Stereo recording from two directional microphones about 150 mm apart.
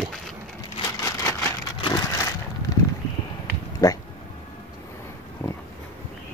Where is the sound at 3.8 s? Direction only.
25° left (ahead or behind).